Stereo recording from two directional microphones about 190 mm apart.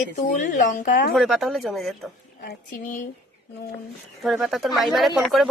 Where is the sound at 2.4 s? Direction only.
50° left (ahead or behind).